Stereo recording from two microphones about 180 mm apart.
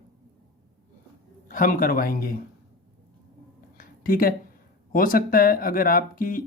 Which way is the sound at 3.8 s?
50° left (ahead or behind).